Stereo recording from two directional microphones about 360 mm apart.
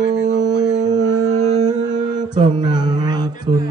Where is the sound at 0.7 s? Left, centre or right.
Centre.